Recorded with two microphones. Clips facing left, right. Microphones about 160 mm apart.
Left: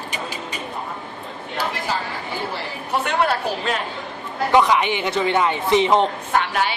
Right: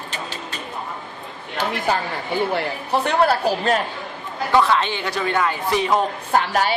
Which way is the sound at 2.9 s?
35° right (ahead or behind).